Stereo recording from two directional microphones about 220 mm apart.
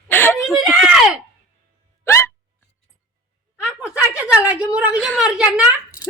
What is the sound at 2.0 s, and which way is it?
Hiccup, 10° left (ahead or behind).